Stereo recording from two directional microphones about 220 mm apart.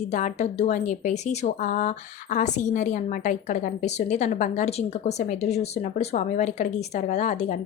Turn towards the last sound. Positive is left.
turn(degrees=35)  # may be behind; listen again after turning